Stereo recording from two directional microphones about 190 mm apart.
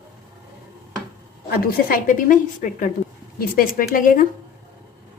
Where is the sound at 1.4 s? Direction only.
50° left (ahead or behind).